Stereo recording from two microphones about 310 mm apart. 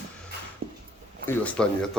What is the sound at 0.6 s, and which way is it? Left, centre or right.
Dog, right.